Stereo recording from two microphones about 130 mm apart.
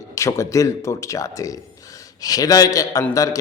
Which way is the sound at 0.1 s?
25° left (ahead or behind).